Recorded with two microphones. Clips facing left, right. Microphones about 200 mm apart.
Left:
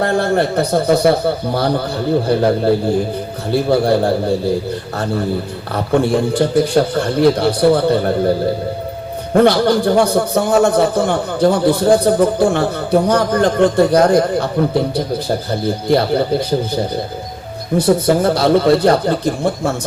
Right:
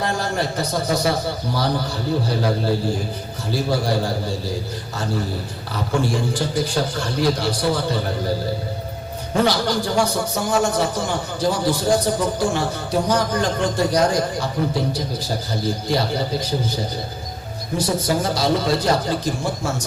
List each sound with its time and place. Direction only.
0.0 s a man's voice: 60° left (ahead or behind)
5.7 s a man's voice: 60° left (ahead or behind)
9.3 s a man's voice: 60° left (ahead or behind)
15.6 s a man's voice: 60° left (ahead or behind)